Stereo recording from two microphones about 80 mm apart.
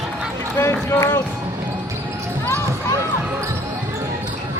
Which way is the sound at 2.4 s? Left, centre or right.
Left.